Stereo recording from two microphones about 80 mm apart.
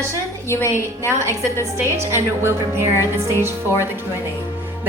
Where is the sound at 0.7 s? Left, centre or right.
Right.